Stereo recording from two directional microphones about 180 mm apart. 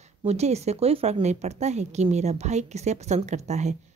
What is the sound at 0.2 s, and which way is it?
A woman's voice, 35° right (ahead or behind).